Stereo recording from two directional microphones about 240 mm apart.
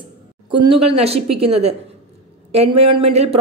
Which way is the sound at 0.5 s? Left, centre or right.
Right.